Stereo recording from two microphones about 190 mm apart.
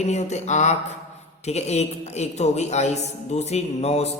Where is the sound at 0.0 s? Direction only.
35° left (ahead or behind).